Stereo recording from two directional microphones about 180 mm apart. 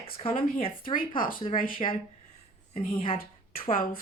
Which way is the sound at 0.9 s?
50° left (ahead or behind).